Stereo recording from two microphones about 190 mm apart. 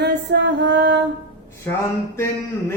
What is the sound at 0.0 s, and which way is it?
Music, 65° right (ahead or behind).